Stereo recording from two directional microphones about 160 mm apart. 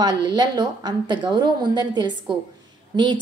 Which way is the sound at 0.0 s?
25° right (ahead or behind).